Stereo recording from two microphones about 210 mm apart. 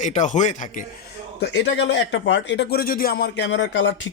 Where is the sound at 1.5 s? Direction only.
60° left (ahead or behind).